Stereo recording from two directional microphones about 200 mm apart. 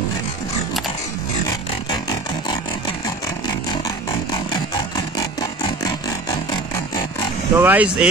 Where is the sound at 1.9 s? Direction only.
20° left (ahead or behind).